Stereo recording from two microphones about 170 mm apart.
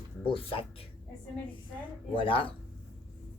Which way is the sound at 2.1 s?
30° left (ahead or behind).